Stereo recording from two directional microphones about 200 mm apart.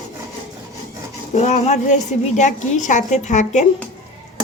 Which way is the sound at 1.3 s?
35° left (ahead or behind).